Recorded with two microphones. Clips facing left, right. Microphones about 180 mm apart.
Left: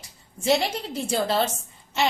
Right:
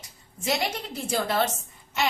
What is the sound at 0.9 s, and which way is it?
Speech, 30° left (ahead or behind).